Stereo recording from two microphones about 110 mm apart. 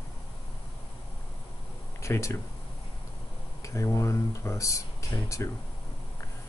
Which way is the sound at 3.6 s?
30° left (ahead or behind).